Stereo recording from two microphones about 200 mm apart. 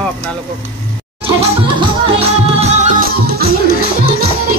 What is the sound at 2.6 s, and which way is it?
Music, 35° right (ahead or behind).